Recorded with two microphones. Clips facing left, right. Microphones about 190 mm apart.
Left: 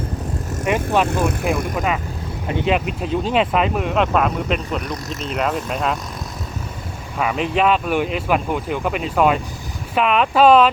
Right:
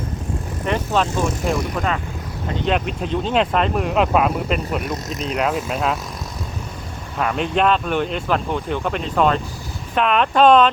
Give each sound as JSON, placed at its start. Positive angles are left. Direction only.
{"t": 0.6, "sound": "speech", "side_deg": 10}
{"t": 1.2, "sound": "speech", "side_deg": 60}
{"t": 1.7, "sound": "speech", "side_deg": 5}
{"t": 7.2, "sound": "speech", "side_deg": 5}